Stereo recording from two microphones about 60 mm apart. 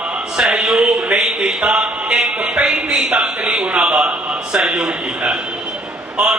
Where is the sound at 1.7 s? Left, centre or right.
Centre.